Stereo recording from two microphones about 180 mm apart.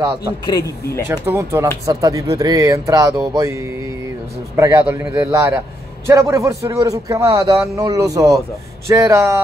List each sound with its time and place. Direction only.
0.5 s speech: 20° left (ahead or behind)
1.0 s speech: 10° right (ahead or behind)